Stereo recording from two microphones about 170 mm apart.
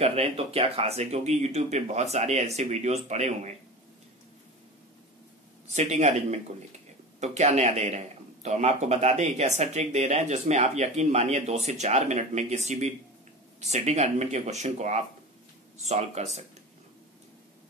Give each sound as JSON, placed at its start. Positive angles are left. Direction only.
{"t": 0.0, "sound": "a man's voice", "side_deg": -35}
{"t": 5.7, "sound": "a man's voice", "side_deg": -40}